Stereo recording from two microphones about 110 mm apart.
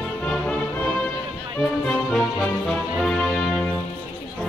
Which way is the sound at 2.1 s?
5° right (ahead or behind).